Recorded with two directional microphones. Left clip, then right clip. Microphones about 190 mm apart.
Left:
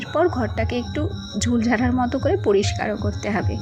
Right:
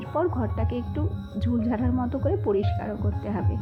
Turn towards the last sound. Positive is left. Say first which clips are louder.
# left 7 dB
turn(degrees=20)  # may be behind; listen again after turning